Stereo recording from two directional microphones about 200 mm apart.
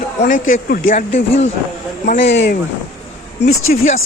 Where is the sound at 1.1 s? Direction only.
35° left (ahead or behind).